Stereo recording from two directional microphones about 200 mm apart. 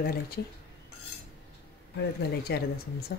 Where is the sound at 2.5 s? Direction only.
50° left (ahead or behind).